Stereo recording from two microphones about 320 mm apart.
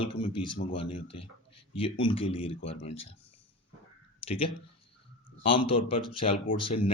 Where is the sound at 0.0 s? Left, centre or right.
Centre.